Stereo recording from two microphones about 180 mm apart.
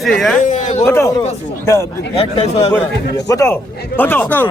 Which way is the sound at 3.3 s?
15° left (ahead or behind).